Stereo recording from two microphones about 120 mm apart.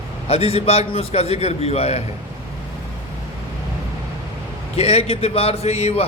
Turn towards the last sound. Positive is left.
turn(degrees=60)  # may be behind; listen again after turning